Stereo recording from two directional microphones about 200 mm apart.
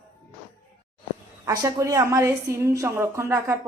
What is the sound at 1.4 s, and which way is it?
A woman's voice, 20° right (ahead or behind).